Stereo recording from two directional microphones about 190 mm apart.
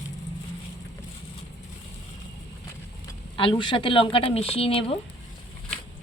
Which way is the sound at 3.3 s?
25° left (ahead or behind).